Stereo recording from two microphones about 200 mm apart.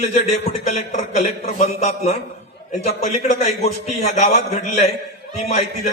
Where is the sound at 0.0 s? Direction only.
35° left (ahead or behind).